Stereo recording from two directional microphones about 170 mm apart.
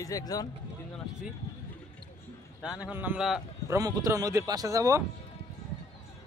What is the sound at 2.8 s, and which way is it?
Speech, 10° right (ahead or behind).